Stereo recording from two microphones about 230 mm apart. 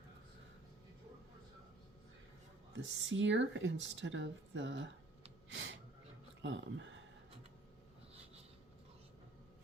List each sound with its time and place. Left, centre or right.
2.7 s speech: right